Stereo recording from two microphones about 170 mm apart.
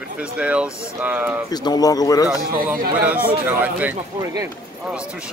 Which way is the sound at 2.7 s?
55° right (ahead or behind).